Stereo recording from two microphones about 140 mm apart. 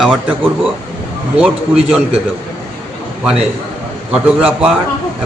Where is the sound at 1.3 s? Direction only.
5° right (ahead or behind).